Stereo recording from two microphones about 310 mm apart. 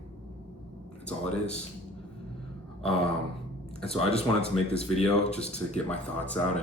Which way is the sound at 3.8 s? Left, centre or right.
Centre.